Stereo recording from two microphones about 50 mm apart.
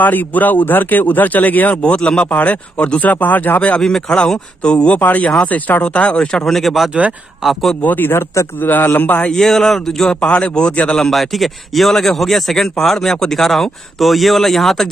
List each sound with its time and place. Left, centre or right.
0.0 s speech: left
1.8 s speech: left
3.8 s speech: centre
6.5 s speech: centre
6.9 s speech: right
7.8 s speech: left
8.1 s speech: left
8.6 s speech: left
9.3 s speech: centre
11.1 s speech: centre